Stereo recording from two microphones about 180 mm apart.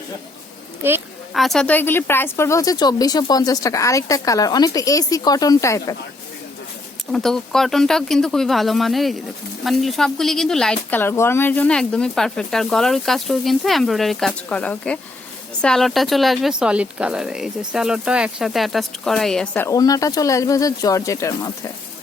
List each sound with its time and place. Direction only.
0.8 s speech: 10° right (ahead or behind)
1.3 s speech: centre (ahead or behind); by 6.0 s 20° left (ahead or behind)
7.1 s speech: centre (ahead or behind)
19.6 s speech: 20° left (ahead or behind)